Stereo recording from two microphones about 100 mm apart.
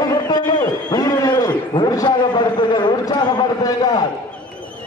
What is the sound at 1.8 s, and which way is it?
A man's voice, 45° left (ahead or behind).